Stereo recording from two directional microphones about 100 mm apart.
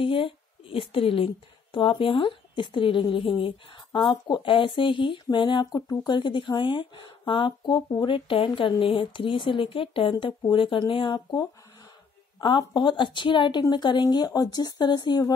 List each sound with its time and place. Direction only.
0.0 s a woman's voice: 60° left (ahead or behind)